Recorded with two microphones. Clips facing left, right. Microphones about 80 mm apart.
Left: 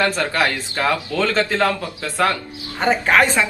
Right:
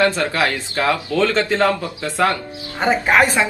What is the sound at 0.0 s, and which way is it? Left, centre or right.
A woman's voice, centre.